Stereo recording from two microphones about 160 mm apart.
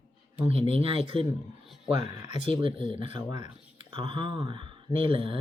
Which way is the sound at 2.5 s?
30° right (ahead or behind).